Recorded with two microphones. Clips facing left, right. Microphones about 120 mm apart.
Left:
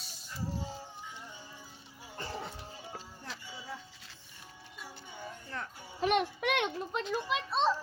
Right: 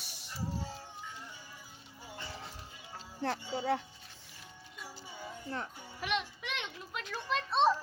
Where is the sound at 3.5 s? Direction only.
75° right (ahead or behind).